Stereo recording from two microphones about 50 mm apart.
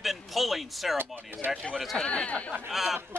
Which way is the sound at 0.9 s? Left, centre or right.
Right.